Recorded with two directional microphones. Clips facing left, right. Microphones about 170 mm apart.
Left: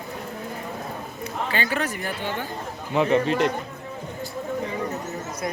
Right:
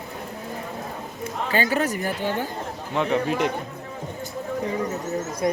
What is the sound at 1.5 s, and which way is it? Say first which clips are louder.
Speech: right 5 dB; 40° right (ahead or behind).